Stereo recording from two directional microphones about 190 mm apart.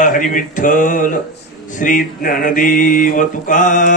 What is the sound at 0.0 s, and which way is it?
Mantra, 45° left (ahead or behind).